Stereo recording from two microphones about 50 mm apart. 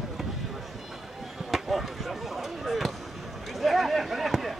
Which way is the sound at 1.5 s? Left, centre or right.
Centre.